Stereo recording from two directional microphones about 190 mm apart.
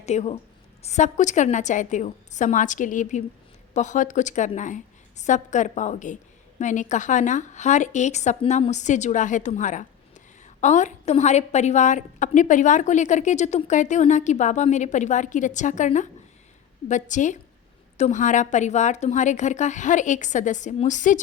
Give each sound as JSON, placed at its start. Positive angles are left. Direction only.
{"t": 0.0, "sound": "a woman's voice", "side_deg": 35}